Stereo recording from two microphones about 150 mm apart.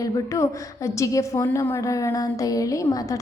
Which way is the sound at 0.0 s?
20° left (ahead or behind).